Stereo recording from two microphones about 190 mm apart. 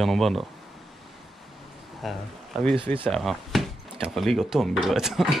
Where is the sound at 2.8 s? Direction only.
25° right (ahead or behind).